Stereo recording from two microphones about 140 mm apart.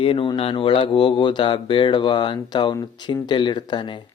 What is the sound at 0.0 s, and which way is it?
Speech, 40° left (ahead or behind).